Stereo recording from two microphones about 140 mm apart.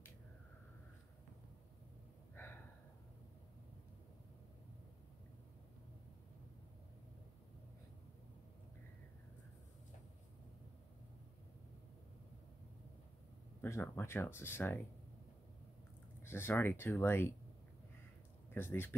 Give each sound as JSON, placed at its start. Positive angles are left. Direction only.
{"t": 2.4, "sound": "a sound", "side_deg": 15}
{"t": 13.6, "sound": "speech", "side_deg": 15}
{"t": 16.2, "sound": "speech", "side_deg": 15}
{"t": 18.5, "sound": "speech", "side_deg": 15}